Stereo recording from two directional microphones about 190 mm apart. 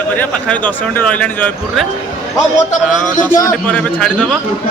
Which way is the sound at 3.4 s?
15° left (ahead or behind).